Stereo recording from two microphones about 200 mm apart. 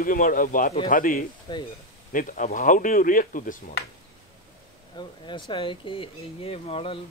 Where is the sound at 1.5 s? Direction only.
20° left (ahead or behind).